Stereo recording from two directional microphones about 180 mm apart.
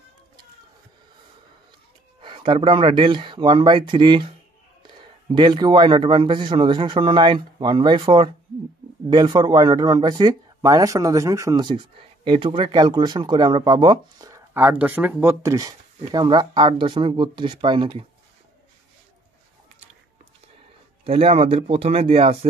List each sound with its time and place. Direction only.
2.2 s speech: 30° right (ahead or behind)
21.0 s speech: 35° right (ahead or behind)